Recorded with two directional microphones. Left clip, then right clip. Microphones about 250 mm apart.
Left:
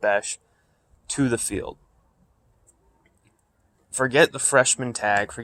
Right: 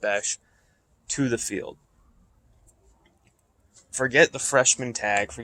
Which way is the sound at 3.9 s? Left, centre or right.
Centre.